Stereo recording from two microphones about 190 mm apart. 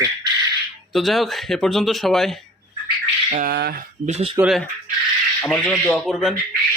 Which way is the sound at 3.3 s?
50° right (ahead or behind).